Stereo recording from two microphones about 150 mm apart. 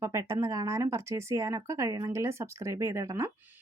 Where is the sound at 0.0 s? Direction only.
20° right (ahead or behind).